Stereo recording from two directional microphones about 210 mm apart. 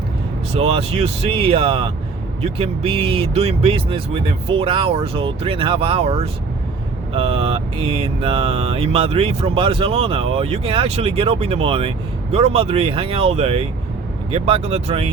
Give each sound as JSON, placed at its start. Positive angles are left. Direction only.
{"t": 0.5, "sound": "mantra", "side_deg": -30}